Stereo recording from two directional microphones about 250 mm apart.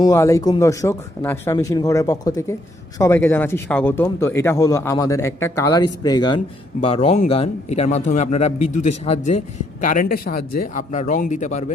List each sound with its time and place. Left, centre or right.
0.0 s a man's voice: centre; by 11.6 s left